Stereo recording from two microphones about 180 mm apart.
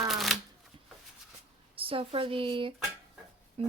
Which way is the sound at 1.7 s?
30° right (ahead or behind).